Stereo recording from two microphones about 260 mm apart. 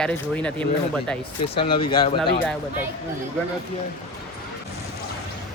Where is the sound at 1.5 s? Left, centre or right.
Centre.